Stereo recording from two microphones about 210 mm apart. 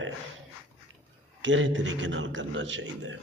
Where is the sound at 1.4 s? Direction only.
65° right (ahead or behind).